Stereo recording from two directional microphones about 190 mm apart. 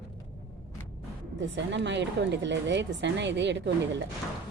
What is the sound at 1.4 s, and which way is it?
A woman's voice, 70° right (ahead or behind).